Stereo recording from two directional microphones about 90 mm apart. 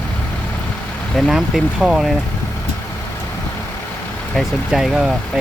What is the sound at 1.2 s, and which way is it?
Speech, centre (ahead or behind).